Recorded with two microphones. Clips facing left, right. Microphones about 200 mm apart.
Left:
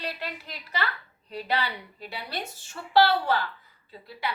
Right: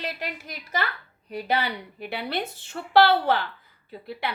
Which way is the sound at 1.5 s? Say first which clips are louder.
Right 3 dB; 55° right (ahead or behind).